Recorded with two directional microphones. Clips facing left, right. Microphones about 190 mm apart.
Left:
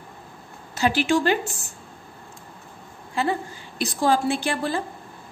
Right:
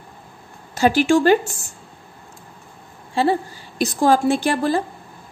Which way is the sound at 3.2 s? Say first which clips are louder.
Right 6 dB; 30° right (ahead or behind).